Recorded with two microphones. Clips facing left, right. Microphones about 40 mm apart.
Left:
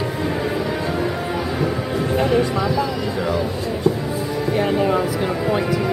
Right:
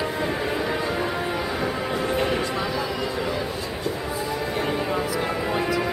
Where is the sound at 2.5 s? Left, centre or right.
Centre.